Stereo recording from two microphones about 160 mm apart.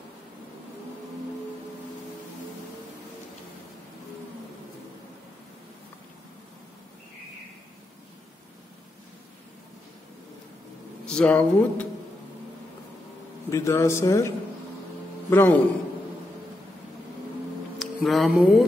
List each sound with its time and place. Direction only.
11.1 s speech: 5° left (ahead or behind)
13.5 s a man's voice: 20° left (ahead or behind)
17.7 s speech: centre (ahead or behind)